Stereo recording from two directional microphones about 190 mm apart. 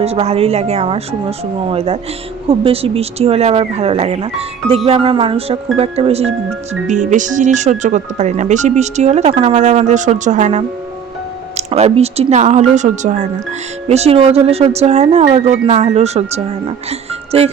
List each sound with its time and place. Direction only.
0.0 s speech: 30° right (ahead or behind)